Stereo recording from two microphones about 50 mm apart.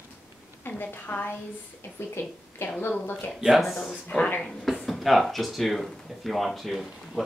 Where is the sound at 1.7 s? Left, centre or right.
Left.